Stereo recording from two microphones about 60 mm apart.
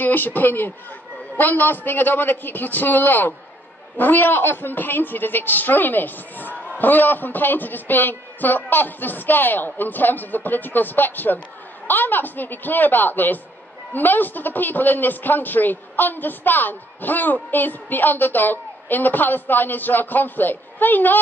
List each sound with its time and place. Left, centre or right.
0.0 s a man's voice: left